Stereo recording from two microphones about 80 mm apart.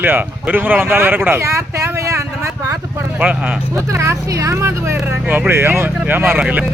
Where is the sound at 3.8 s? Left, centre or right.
Right.